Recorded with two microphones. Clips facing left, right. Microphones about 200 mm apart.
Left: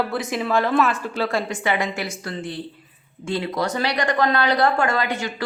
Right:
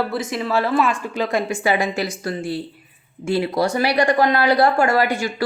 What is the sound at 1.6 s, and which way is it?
Speech, 30° right (ahead or behind).